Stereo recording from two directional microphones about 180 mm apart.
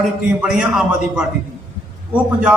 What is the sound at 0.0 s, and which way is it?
A man's voice, centre (ahead or behind).